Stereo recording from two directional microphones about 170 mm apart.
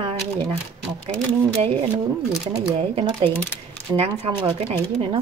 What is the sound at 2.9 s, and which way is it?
A woman's voice, 30° right (ahead or behind).